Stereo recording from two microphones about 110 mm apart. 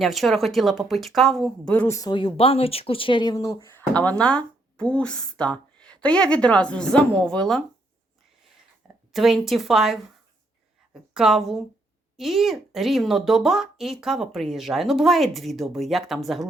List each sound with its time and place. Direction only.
0.0 s speech: centre (ahead or behind)
1.9 s speech: 30° left (ahead or behind)
2.1 s speech: 55° left (ahead or behind); by 7.6 s 5° left (ahead or behind)
9.1 s speech: centre (ahead or behind)
11.1 s speech: 5° right (ahead or behind)